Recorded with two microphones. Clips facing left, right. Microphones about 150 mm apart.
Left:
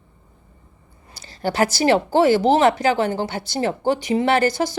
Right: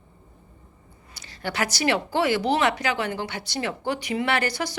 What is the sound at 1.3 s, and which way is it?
A woman's voice, 35° left (ahead or behind).